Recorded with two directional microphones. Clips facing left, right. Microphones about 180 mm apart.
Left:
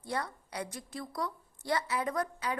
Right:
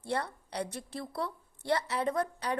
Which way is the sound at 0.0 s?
30° right (ahead or behind).